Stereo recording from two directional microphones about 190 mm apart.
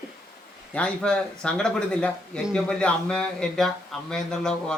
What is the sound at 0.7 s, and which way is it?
Speech, 5° left (ahead or behind).